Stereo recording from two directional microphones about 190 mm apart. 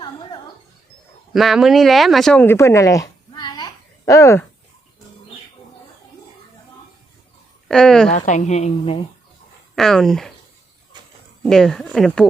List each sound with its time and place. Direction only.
1.3 s speech: centre (ahead or behind); by 4.4 s 15° left (ahead or behind)
7.7 s speech: 5° left (ahead or behind)
8.1 s a woman's voice: 40° left (ahead or behind)
9.7 s speech: centre (ahead or behind)
11.4 s speech: 5° left (ahead or behind)